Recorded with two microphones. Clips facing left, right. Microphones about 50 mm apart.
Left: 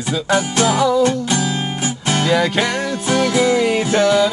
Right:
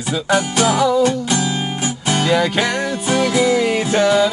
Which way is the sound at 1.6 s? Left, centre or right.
Centre.